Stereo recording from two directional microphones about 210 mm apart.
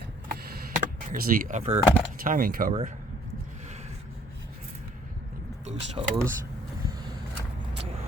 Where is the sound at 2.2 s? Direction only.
40° right (ahead or behind).